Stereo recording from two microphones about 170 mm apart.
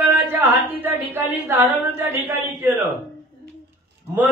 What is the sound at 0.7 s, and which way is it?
A man's voice, 10° right (ahead or behind).